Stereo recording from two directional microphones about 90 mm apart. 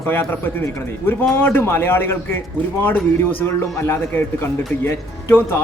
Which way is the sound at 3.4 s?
30° left (ahead or behind).